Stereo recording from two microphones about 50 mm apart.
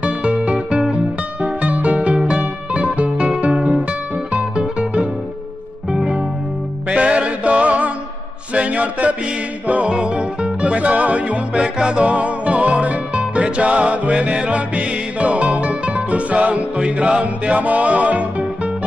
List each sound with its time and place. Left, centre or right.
0.0 s music: right
6.9 s music: right